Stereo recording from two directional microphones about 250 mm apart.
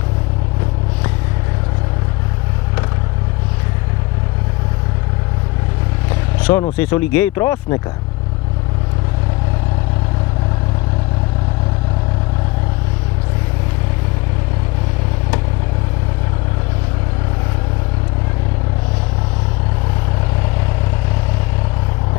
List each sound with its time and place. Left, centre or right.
6.4 s speech: centre
6.8 s speech: centre